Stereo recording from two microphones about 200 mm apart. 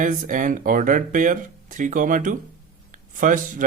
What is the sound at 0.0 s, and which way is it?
Speech, 40° right (ahead or behind).